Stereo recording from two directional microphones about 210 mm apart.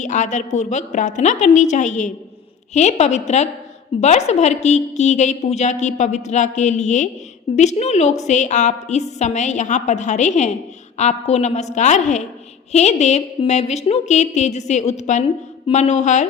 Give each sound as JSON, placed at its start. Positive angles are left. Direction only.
{"t": 0.0, "sound": "a woman's voice", "side_deg": 35}